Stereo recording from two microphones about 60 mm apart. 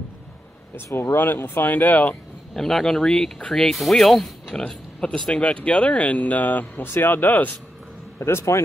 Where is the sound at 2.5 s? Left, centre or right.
Centre; by 7.5 s left.